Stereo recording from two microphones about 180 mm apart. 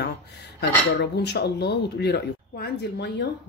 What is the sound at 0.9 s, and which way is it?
Speech, 70° left (ahead or behind).